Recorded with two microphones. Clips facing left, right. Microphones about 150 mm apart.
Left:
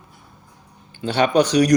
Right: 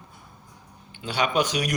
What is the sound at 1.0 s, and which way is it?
Speech, 40° left (ahead or behind).